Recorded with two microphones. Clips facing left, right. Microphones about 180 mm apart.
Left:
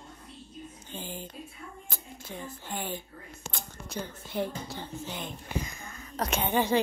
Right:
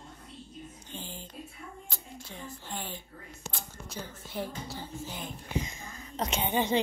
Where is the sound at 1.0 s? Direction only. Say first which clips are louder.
Left 4 dB; 10° left (ahead or behind).